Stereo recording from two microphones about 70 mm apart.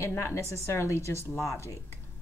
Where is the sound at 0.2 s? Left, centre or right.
Left.